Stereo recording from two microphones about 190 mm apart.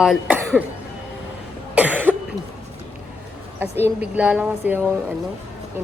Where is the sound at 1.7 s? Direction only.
10° right (ahead or behind).